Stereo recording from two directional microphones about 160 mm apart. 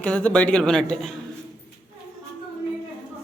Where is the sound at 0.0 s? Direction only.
10° left (ahead or behind).